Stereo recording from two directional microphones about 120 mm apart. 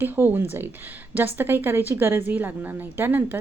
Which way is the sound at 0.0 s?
20° right (ahead or behind).